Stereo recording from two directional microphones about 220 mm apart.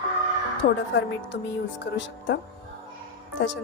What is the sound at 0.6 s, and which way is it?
Speech, 45° left (ahead or behind).